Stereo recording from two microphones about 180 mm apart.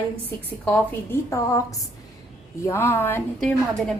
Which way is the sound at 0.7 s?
15° left (ahead or behind).